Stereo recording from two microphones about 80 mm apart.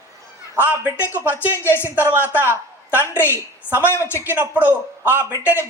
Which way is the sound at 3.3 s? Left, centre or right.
Right.